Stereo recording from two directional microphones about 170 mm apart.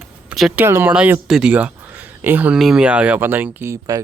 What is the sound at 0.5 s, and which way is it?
Speech, 15° right (ahead or behind).